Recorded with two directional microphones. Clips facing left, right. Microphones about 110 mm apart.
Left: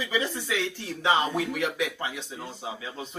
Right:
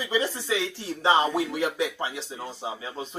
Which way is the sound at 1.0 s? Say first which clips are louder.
Right 2 dB; 30° right (ahead or behind).